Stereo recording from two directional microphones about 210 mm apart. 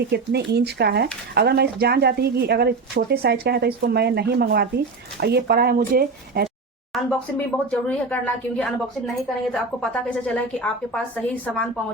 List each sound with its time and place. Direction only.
0.1 s speech: 50° right (ahead or behind)
6.9 s speech: centre (ahead or behind)